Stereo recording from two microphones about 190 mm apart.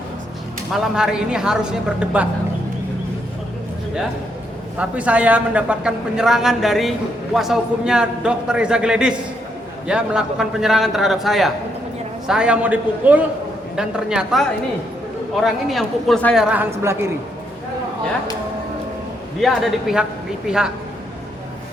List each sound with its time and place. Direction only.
0.7 s a man's voice: 5° right (ahead or behind)
4.8 s a man's voice: 5° right (ahead or behind)
19.4 s a man's voice: centre (ahead or behind)